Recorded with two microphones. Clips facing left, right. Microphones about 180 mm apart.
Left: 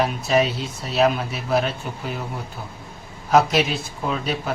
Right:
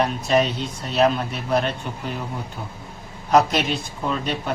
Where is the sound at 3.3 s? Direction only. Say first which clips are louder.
Even; centre (ahead or behind).